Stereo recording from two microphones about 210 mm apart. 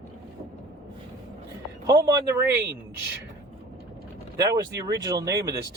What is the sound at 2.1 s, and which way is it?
Speech, 15° right (ahead or behind).